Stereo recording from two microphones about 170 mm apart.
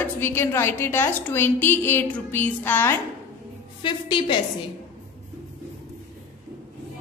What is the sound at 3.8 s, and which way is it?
Speech, 30° left (ahead or behind).